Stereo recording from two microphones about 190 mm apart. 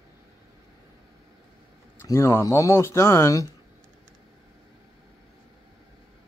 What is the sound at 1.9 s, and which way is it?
Speech, 15° left (ahead or behind).